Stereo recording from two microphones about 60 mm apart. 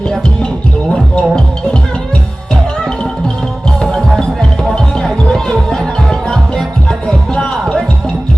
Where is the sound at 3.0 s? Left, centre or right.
Centre.